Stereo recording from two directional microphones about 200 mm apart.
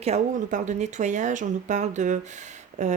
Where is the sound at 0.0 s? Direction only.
35° right (ahead or behind).